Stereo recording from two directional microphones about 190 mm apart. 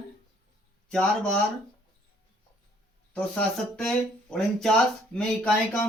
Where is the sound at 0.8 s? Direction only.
5° left (ahead or behind).